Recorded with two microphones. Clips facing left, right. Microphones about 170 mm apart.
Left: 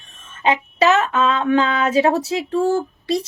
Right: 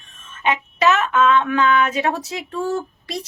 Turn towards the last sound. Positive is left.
turn(degrees=30)  # may be behind; listen again after turning